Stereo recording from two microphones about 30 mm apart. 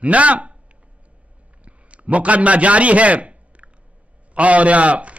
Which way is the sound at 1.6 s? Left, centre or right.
Right.